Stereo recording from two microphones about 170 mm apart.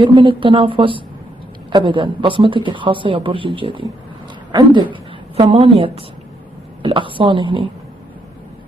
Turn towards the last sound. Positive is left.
turn(degrees=-30)  # may be behind; listen again after turning